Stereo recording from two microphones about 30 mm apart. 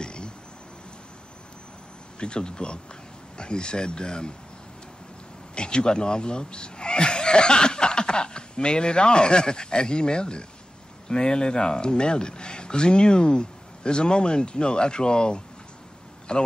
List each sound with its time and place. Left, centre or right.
0.0 s a sound: left
2.1 s speech: left
5.5 s speech: left